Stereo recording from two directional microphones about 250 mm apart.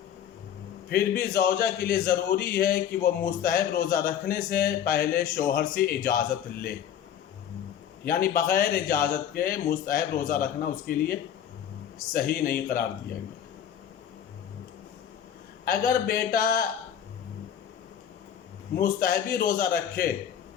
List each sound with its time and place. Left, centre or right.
0.9 s a man's voice: left
8.0 s a man's voice: left
15.6 s a man's voice: left
18.8 s a man's voice: left